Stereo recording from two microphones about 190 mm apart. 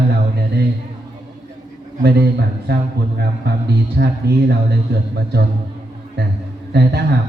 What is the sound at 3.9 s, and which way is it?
Speech, 55° right (ahead or behind).